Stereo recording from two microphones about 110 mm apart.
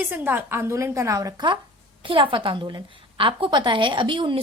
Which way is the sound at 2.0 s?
50° right (ahead or behind).